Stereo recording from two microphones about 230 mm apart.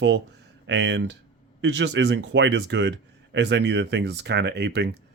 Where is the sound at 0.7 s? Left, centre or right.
Right.